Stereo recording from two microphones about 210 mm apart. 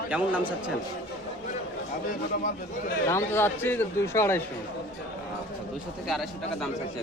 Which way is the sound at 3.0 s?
10° left (ahead or behind).